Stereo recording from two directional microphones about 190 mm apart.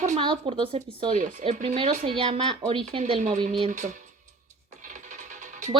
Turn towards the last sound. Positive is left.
turn(degrees=-40)  # may be behind; listen again after turning